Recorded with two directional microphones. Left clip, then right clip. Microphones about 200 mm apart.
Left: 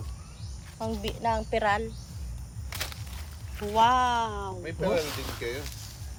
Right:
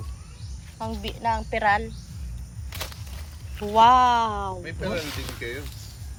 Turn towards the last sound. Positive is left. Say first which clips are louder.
# right 1 dB
turn(degrees=25)  # may be behind; listen again after turning